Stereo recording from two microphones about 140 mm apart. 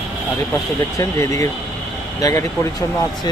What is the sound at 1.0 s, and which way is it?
Speech, 20° left (ahead or behind).